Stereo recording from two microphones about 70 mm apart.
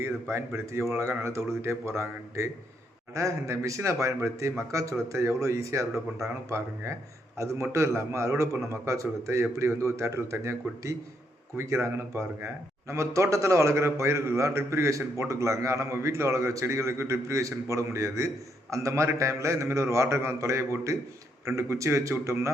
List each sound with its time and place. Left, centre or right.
0.0 s a man's voice: right